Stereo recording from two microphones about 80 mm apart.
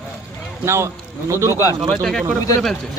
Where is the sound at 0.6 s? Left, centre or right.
Right.